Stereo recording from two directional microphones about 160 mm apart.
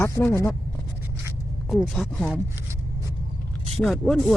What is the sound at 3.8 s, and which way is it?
Speech, centre (ahead or behind).